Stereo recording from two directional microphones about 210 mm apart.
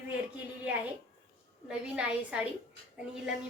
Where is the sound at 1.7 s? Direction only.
5° right (ahead or behind).